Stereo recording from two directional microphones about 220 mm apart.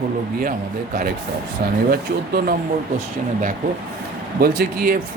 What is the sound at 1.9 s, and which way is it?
Speech, 45° right (ahead or behind).